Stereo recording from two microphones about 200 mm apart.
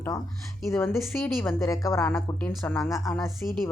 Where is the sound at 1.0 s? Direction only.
10° left (ahead or behind).